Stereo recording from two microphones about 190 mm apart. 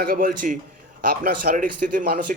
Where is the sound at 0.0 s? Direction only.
50° right (ahead or behind).